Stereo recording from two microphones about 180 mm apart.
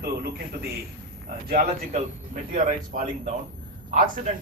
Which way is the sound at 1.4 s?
45° right (ahead or behind).